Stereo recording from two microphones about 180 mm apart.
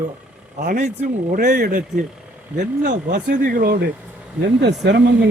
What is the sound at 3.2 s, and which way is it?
Speech, 50° right (ahead or behind).